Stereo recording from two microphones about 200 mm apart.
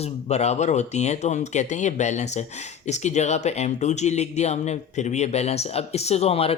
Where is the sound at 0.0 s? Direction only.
30° left (ahead or behind).